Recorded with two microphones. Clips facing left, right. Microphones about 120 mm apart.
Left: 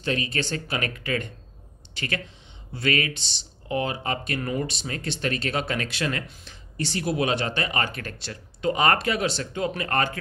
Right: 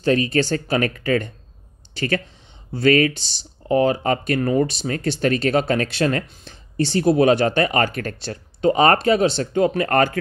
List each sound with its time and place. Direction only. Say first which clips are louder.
0.0 s speech: right 9 dB; 40° right (ahead or behind)
9.5 s speech: right 9 dB; 40° right (ahead or behind)